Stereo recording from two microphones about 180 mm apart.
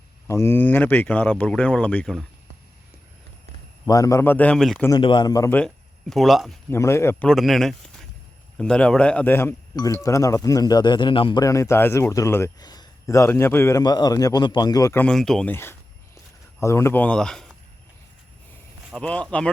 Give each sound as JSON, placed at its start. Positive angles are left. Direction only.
{"t": 0.3, "sound": "speech", "side_deg": 15}
{"t": 3.8, "sound": "speech", "side_deg": 20}
{"t": 4.9, "sound": "speech", "side_deg": 25}
{"t": 6.7, "sound": "speech", "side_deg": 15}
{"t": 7.3, "sound": "speech", "side_deg": 0}
{"t": 18.9, "sound": "speech", "side_deg": 5}